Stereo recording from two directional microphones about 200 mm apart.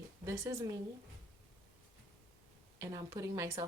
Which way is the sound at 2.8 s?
15° right (ahead or behind).